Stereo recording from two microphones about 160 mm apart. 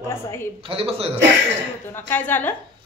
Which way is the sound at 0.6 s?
35° right (ahead or behind).